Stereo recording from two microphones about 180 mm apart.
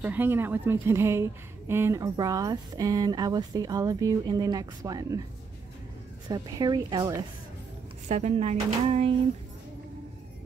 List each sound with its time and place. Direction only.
0.0 s a woman's voice: 10° right (ahead or behind)
6.2 s a woman's voice: 25° right (ahead or behind)
8.1 s speech: 40° right (ahead or behind)